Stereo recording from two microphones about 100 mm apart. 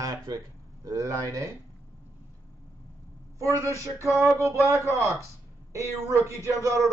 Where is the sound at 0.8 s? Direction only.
35° right (ahead or behind).